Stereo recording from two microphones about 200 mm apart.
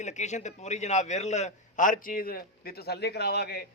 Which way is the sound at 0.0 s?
35° left (ahead or behind).